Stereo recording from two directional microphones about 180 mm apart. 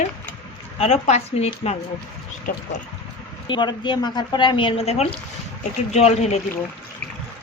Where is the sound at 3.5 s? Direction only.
25° left (ahead or behind).